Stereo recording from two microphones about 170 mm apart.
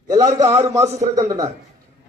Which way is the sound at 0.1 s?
20° right (ahead or behind).